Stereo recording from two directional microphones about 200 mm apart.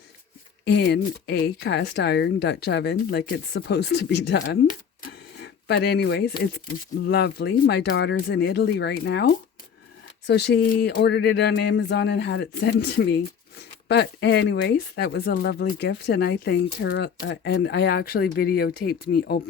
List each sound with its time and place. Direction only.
0.6 s speech: 55° left (ahead or behind)